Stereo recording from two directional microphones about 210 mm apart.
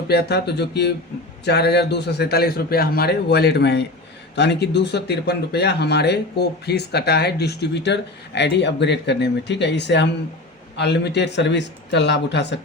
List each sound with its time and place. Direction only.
0.1 s speech: 50° left (ahead or behind)